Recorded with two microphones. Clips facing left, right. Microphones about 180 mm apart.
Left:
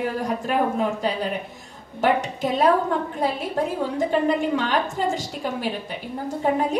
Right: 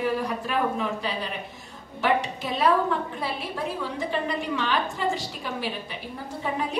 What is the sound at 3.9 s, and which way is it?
A woman's voice, 45° left (ahead or behind).